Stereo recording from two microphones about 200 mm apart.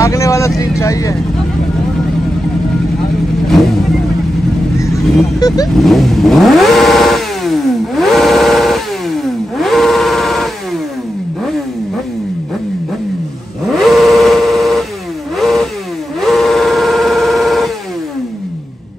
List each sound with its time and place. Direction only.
0.0 s vehicle: 15° left (ahead or behind)
0.6 s speech: 15° left (ahead or behind)
4.7 s vehicle: 15° left (ahead or behind)
5.8 s vehicle: centre (ahead or behind)
13.7 s a sound: centre (ahead or behind)
15.3 s vehicle: centre (ahead or behind)
16.2 s a sound: centre (ahead or behind)